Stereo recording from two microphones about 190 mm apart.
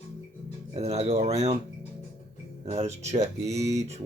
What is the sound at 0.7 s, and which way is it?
Speech, 35° right (ahead or behind).